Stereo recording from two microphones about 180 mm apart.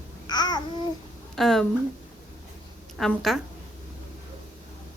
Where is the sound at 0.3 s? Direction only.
20° left (ahead or behind).